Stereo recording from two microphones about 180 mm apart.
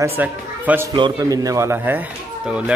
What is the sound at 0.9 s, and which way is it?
Speech, 25° right (ahead or behind).